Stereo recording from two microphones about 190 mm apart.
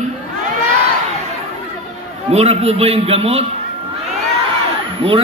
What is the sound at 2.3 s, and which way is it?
A man's voice, 35° right (ahead or behind).